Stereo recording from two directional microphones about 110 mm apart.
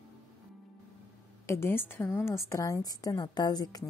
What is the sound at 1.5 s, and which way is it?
A woman's voice, 20° left (ahead or behind).